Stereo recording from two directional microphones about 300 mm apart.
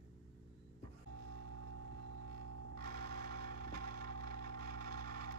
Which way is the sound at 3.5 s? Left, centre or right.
Centre.